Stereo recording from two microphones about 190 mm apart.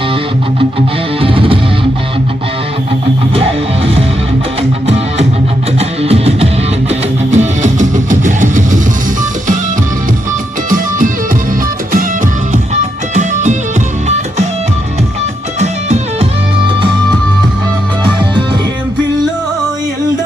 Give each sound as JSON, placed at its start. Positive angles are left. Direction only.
{"t": 1.2, "sound": "music", "side_deg": -30}
{"t": 3.3, "sound": "music", "side_deg": -30}
{"t": 5.8, "sound": "music", "side_deg": -35}
{"t": 10.7, "sound": "music", "side_deg": -45}
{"t": 13.1, "sound": "music", "side_deg": -40}
{"t": 15.5, "sound": "music", "side_deg": -35}